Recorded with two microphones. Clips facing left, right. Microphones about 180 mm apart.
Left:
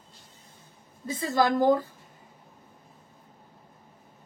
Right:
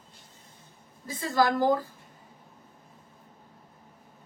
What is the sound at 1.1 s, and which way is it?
Speech, 25° left (ahead or behind).